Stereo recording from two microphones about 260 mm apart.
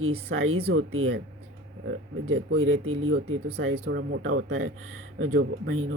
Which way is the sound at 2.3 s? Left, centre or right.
Right.